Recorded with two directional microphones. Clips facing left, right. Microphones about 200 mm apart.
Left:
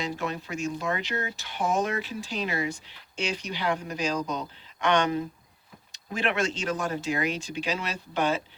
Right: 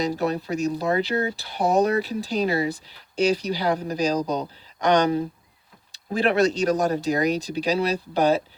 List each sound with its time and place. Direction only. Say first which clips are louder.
0.0 s speech: right 7 dB; 35° right (ahead or behind)